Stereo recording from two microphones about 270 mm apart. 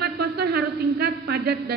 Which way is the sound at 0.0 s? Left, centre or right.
Right.